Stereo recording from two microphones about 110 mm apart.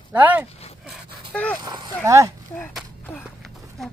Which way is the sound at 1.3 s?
10° left (ahead or behind).